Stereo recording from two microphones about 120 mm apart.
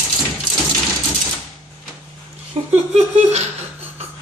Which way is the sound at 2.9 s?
65° right (ahead or behind).